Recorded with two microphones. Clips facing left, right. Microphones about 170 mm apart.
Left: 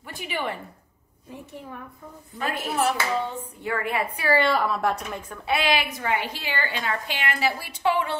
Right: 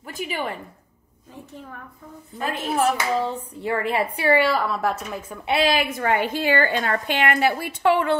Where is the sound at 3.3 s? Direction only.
30° right (ahead or behind).